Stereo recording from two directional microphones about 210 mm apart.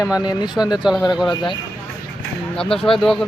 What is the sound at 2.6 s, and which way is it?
Speech, 5° left (ahead or behind).